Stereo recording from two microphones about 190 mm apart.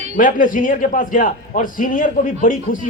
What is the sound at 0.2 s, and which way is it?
A man's voice, 45° left (ahead or behind).